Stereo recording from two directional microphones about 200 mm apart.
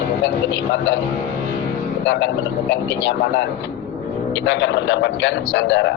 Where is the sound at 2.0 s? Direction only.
65° left (ahead or behind).